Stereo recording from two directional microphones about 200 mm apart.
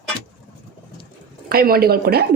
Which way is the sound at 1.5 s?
50° right (ahead or behind).